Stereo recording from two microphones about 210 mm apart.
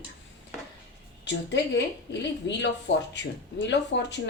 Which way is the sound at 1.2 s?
55° left (ahead or behind).